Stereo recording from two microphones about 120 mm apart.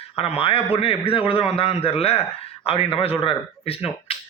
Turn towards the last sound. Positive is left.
turn(degrees=55)  # may be behind; listen again after turning